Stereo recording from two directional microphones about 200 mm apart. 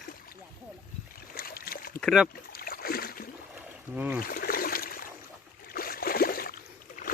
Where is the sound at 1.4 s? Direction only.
50° left (ahead or behind).